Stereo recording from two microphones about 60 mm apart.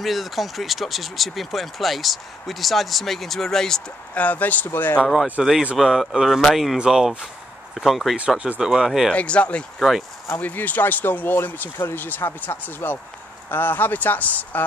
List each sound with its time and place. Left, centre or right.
0.0 s speech: centre
4.1 s speech: left
5.0 s speech: centre
9.1 s speech: left
9.8 s speech: centre
10.4 s speech: left